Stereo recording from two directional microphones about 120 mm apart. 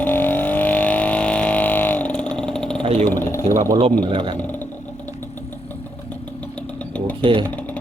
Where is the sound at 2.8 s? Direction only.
55° right (ahead or behind).